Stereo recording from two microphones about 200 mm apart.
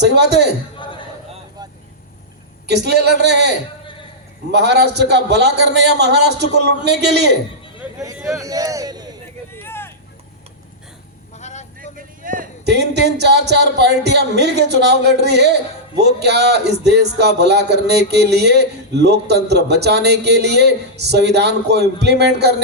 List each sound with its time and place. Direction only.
0.0 s a man's voice: 55° right (ahead or behind)
2.6 s a man's voice: 55° right (ahead or behind)
4.5 s a man's voice: 55° right (ahead or behind)
7.8 s speech: 15° right (ahead or behind)
9.6 s vehicle: 10° left (ahead or behind)
11.3 s a sound: 35° left (ahead or behind)
11.8 s a sound: 45° right (ahead or behind)
13.5 s a man's voice: 55° right (ahead or behind)